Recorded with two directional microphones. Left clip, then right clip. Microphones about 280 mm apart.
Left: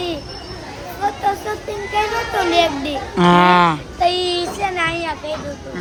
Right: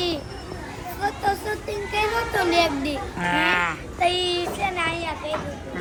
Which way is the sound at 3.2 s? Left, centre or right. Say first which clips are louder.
Left 10 dB; left.